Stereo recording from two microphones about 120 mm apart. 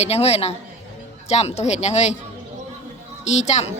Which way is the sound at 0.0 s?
60° left (ahead or behind).